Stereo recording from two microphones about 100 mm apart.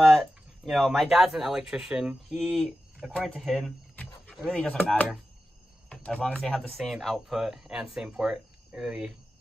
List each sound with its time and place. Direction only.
0.0 s speech: centre (ahead or behind)
3.9 s a sound: 15° left (ahead or behind)
4.4 s speech: 5° left (ahead or behind)
5.9 s speech: 10° left (ahead or behind)